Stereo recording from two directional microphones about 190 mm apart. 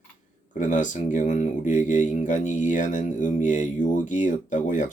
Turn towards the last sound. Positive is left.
turn(degrees=40)  # may be behind; listen again after turning